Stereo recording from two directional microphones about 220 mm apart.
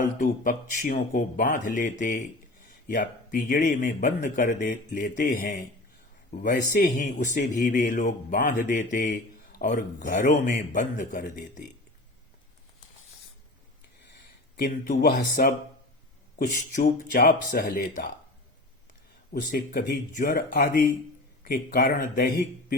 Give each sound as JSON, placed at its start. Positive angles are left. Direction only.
{"t": 0.2, "sound": "a man's voice", "side_deg": 40}
{"t": 14.5, "sound": "a man's voice", "side_deg": 40}
{"t": 16.8, "sound": "a man's voice", "side_deg": 40}
{"t": 19.3, "sound": "speech", "side_deg": 45}